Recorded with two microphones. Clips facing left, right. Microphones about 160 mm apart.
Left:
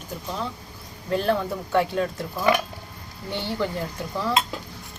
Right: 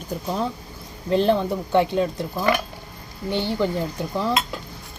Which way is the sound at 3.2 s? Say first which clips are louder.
Right 5 dB; 20° right (ahead or behind).